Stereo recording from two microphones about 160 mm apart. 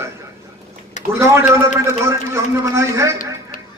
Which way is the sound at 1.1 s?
20° right (ahead or behind).